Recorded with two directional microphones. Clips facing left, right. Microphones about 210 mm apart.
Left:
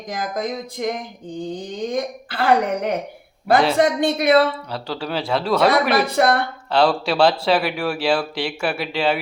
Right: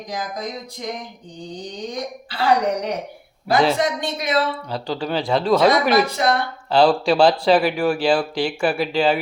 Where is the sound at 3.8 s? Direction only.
55° left (ahead or behind).